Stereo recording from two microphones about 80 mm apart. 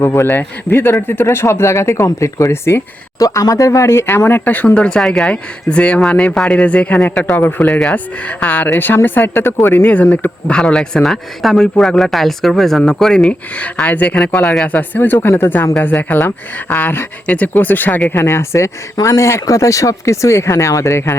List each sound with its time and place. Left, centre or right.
0.0 s speech: left
3.2 s speech: left; by 7.3 s centre
7.3 s speech: left
7.7 s speech: centre
8.7 s speech: left
9.8 s speech: centre
18.2 s speech: left